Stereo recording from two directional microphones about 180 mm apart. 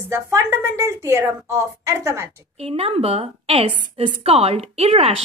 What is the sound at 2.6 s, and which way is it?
A woman's voice, 35° right (ahead or behind).